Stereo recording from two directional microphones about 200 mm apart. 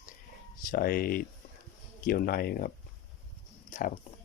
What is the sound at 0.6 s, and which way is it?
Speech, 45° left (ahead or behind).